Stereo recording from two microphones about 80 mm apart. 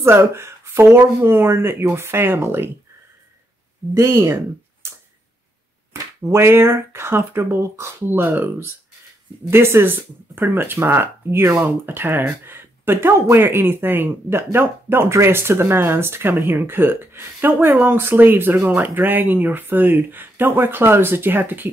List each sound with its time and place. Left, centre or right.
0.0 s speech: right
3.9 s speech: right
6.2 s speech: right